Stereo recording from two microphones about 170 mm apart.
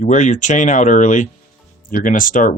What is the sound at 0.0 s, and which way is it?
Speech, 45° left (ahead or behind).